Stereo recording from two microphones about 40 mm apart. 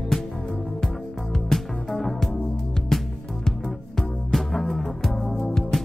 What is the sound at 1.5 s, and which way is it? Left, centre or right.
Music, centre.